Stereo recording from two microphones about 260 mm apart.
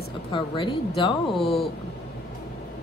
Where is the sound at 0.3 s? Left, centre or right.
Centre.